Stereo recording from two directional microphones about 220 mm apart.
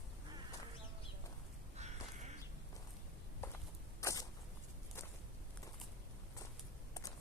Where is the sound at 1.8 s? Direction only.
30° right (ahead or behind).